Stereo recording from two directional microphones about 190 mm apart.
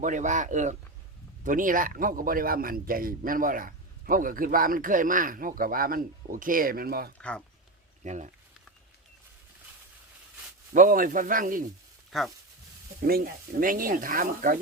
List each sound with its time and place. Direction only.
0.0 s speech: 40° right (ahead or behind)
7.2 s speech: 5° left (ahead or behind)
8.0 s speech: 40° right (ahead or behind)
10.8 s speech: 45° right (ahead or behind)
12.1 s speech: centre (ahead or behind)
13.1 s speech: 50° right (ahead or behind)